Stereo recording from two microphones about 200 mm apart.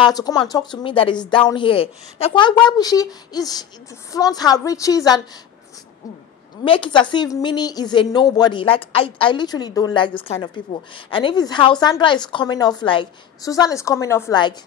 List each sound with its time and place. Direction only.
0.0 s a woman's voice: 20° left (ahead or behind)
6.6 s a woman's voice: 25° left (ahead or behind)